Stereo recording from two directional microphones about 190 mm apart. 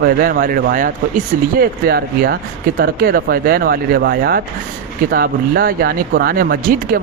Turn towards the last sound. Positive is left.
turn(degrees=-50)  # may be behind; listen again after turning